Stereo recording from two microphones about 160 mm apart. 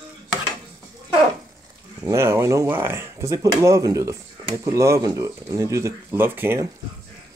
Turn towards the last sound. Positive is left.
turn(degrees=-15)  # may be behind; listen again after turning